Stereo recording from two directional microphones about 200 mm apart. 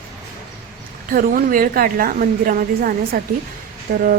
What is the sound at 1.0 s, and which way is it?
A woman's voice, 45° right (ahead or behind).